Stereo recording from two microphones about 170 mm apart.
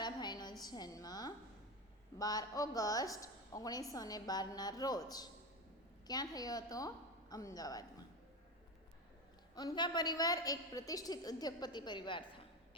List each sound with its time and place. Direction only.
0.0 s a sound: 25° left (ahead or behind)
0.6 s a woman's voice: 25° left (ahead or behind)
9.6 s a woman's voice: 25° left (ahead or behind)